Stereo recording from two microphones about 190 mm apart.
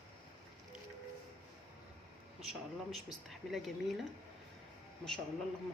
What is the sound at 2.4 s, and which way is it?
Speech, centre (ahead or behind).